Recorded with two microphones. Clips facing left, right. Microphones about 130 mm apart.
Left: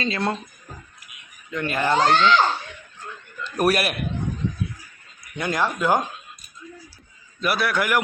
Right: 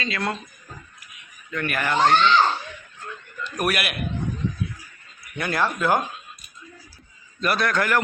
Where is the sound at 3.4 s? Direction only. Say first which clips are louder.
Left 4 dB; 30° left (ahead or behind).